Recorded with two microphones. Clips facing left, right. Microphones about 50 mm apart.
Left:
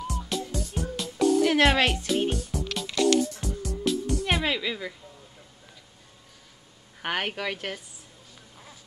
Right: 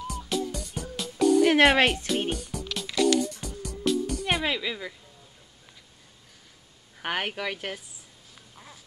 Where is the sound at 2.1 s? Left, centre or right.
Centre.